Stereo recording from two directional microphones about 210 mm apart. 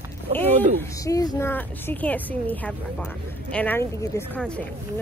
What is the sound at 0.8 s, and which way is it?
Speech, 15° left (ahead or behind).